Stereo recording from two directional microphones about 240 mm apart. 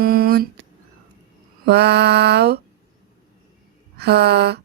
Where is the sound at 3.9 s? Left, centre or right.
Right.